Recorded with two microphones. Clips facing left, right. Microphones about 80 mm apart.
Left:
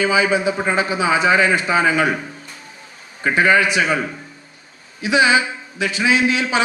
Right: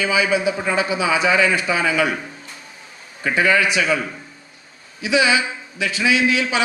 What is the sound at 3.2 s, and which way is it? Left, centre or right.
Speech, left.